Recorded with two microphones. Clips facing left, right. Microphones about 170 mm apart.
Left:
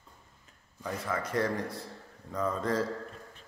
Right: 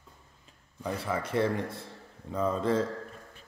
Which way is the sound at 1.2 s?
25° right (ahead or behind).